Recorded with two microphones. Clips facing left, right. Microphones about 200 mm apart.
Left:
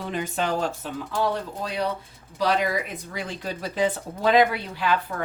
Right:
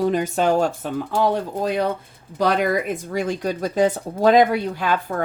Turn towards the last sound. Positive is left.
turn(degrees=-45)  # may be behind; listen again after turning